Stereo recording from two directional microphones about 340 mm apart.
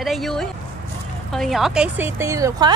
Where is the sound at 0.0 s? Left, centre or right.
Centre.